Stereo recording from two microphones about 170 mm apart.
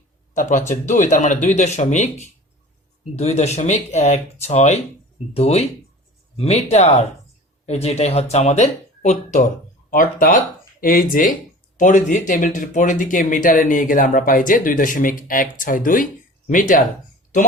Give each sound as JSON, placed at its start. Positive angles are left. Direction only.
{"t": 0.3, "sound": "speech", "side_deg": 45}